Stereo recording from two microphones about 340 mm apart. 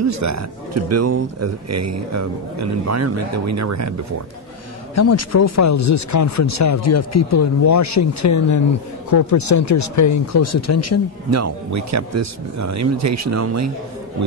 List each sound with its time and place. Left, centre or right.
0.0 s speech: right
4.9 s speech: left
11.2 s speech: right